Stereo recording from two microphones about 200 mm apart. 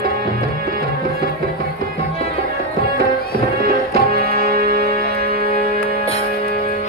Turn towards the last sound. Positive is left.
turn(degrees=-50)  # may be behind; listen again after turning